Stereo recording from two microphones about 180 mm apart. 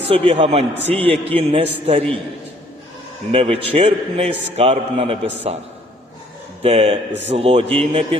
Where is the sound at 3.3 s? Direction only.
35° right (ahead or behind).